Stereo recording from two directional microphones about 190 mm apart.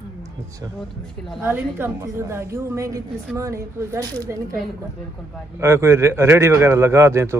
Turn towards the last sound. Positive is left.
turn(degrees=-15)  # may be behind; listen again after turning